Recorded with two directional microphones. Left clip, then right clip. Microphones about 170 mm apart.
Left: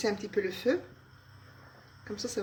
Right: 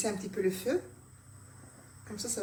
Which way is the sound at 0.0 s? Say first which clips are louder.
Left 1 dB; 55° left (ahead or behind).